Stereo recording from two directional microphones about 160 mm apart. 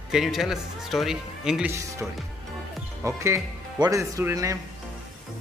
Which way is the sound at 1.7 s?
20° right (ahead or behind).